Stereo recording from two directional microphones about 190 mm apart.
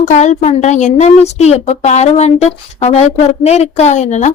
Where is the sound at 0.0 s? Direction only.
40° left (ahead or behind).